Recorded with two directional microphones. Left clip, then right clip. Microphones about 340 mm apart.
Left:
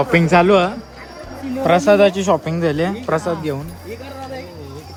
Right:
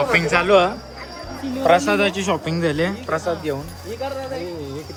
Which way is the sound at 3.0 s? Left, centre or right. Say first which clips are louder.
Left 3 dB; centre.